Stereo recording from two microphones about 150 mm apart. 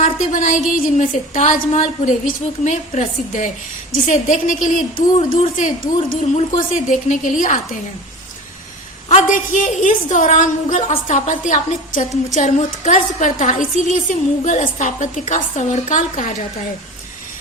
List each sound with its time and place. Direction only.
0.0 s a sound: 55° left (ahead or behind)
0.9 s a woman's voice: 55° left (ahead or behind)
9.0 s a woman's voice: 55° left (ahead or behind)